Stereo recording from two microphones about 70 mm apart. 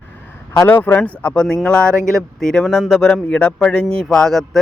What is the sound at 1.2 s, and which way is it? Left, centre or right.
Speech, centre.